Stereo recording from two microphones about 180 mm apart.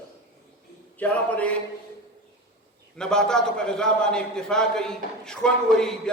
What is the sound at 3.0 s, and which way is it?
A man's voice, 5° left (ahead or behind).